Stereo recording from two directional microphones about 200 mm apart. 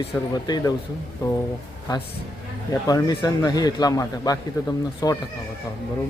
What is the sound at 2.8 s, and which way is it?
Speech, 20° left (ahead or behind).